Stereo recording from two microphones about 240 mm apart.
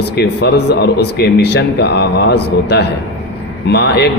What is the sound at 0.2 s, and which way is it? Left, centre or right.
Speech, left.